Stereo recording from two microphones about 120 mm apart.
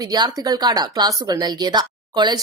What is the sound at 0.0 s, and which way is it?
Speech, 30° right (ahead or behind).